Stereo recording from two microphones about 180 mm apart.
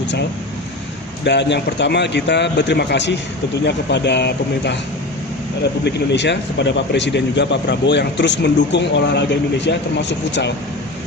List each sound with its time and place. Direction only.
1.2 s speech: 70° left (ahead or behind)
5.8 s speech: 75° left (ahead or behind)